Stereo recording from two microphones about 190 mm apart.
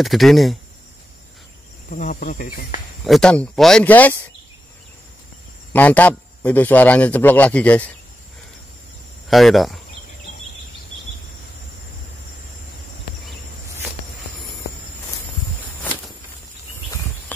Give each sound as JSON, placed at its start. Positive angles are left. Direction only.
{"t": 0.0, "sound": "speech", "side_deg": 0}
{"t": 1.9, "sound": "speech", "side_deg": 45}
{"t": 3.0, "sound": "speech", "side_deg": 0}
{"t": 5.7, "sound": "a man's voice", "side_deg": 10}
{"t": 9.3, "sound": "speech", "side_deg": 0}